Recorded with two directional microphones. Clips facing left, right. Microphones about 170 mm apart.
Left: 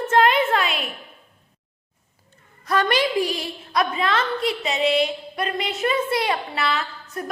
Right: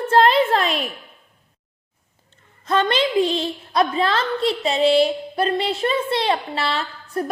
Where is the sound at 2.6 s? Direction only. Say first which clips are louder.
Right 1 dB; 25° right (ahead or behind).